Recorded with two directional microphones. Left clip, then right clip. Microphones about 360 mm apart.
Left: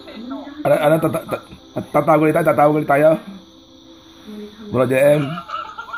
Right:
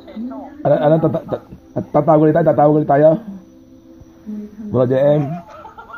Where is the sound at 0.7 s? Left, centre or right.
Centre.